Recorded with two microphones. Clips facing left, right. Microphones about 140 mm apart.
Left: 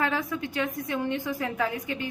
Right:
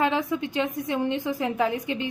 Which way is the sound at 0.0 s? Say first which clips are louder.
Right 4 dB; 20° right (ahead or behind).